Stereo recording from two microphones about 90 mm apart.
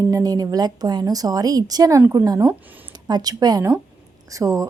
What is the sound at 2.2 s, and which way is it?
Speech, 45° right (ahead or behind).